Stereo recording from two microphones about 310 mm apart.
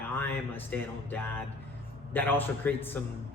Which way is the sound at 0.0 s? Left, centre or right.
Centre.